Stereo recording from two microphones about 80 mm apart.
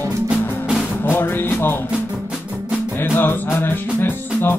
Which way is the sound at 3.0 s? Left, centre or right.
Left.